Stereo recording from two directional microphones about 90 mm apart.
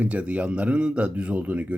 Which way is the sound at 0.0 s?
15° right (ahead or behind).